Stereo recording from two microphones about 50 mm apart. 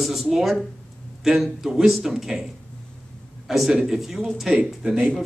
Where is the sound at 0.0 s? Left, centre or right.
Centre.